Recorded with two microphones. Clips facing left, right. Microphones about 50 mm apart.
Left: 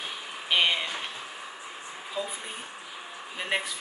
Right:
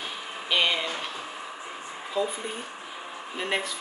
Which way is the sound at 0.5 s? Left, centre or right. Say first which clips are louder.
Even; centre.